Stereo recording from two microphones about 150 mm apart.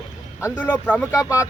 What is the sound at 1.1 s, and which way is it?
Speech, 20° left (ahead or behind).